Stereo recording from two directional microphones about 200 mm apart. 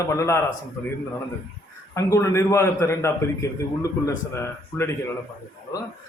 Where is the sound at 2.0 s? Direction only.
15° left (ahead or behind).